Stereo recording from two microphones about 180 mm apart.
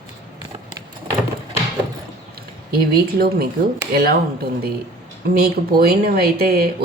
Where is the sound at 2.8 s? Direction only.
60° right (ahead or behind).